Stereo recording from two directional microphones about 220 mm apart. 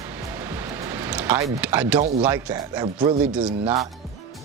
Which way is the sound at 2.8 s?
25° right (ahead or behind).